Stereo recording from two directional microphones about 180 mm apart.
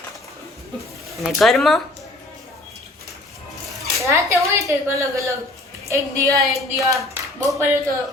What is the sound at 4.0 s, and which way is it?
Speech, 15° right (ahead or behind).